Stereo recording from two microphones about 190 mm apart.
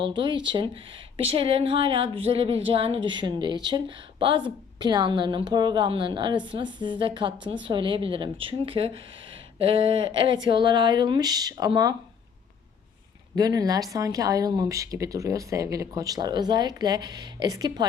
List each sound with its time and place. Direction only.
0.0 s speech: 25° right (ahead or behind)
13.3 s speech: 20° right (ahead or behind)